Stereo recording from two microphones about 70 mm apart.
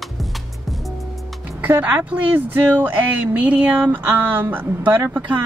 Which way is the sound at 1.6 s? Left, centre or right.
Right.